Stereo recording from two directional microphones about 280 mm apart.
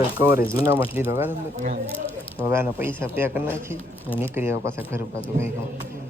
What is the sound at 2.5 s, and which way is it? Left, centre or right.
Speech, centre.